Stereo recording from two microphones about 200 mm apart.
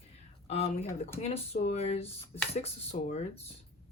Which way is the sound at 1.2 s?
30° left (ahead or behind).